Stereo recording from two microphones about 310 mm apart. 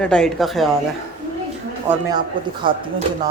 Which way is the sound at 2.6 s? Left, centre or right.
Centre.